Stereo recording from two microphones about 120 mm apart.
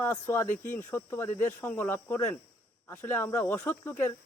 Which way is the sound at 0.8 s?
20° left (ahead or behind).